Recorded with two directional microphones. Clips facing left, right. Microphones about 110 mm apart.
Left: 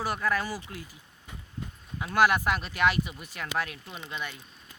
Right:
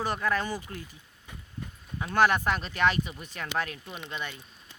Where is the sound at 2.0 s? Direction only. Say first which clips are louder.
Even; 5° left (ahead or behind).